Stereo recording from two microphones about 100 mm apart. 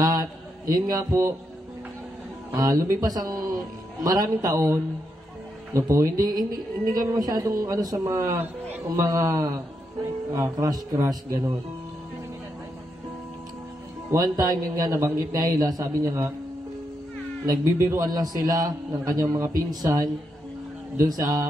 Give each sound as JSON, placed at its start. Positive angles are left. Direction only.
{"t": 0.0, "sound": "a sound", "side_deg": -40}
{"t": 0.7, "sound": "a man's voice", "side_deg": -35}
{"t": 2.6, "sound": "a man's voice", "side_deg": -35}
{"t": 14.1, "sound": "a man's voice", "side_deg": -40}
{"t": 17.5, "sound": "a man's voice", "side_deg": -30}